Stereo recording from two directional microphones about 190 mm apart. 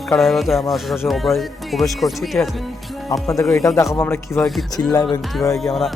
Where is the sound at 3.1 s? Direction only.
15° left (ahead or behind).